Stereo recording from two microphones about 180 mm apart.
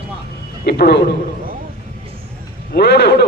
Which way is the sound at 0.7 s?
65° left (ahead or behind).